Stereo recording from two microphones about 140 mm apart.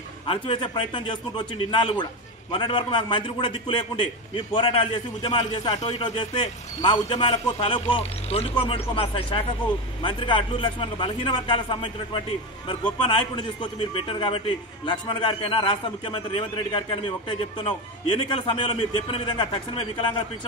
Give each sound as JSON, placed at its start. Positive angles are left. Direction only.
{"t": 0.3, "sound": "a man's voice", "side_deg": 40}